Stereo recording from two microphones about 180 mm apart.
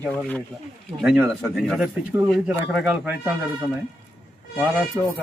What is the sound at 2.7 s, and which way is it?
Speech, 10° right (ahead or behind).